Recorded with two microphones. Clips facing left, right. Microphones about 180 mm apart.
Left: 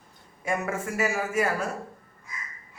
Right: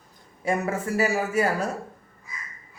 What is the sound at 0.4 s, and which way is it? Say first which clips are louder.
Speech: right 3 dB; 35° right (ahead or behind).